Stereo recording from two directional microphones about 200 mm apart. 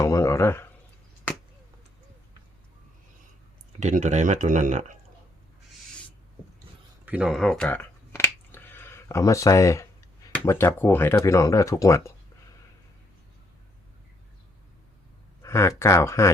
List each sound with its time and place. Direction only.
0.0 s speech: 15° left (ahead or behind)
3.8 s speech: 35° right (ahead or behind)
7.0 s a sound: 5° right (ahead or behind); by 9.8 s 15° left (ahead or behind)
10.2 s speech: 15° left (ahead or behind)
15.4 s speech: 15° left (ahead or behind)